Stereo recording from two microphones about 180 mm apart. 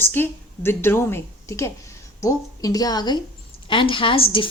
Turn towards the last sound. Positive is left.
turn(degrees=30)  # may be behind; listen again after turning